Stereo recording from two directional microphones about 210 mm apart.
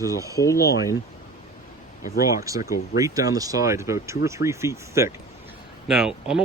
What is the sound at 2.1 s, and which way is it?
Speech, 15° right (ahead or behind).